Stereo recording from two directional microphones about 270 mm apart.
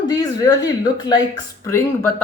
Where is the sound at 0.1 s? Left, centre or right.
Centre.